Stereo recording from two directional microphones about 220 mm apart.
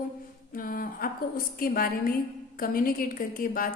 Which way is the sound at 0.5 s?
40° left (ahead or behind).